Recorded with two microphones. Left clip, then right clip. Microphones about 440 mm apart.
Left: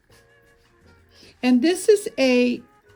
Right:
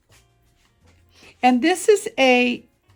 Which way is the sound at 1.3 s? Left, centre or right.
Centre.